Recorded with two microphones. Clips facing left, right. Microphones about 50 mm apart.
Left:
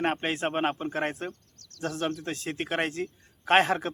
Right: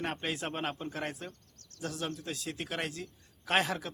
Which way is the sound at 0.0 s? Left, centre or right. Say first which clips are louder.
Left 7 dB; left.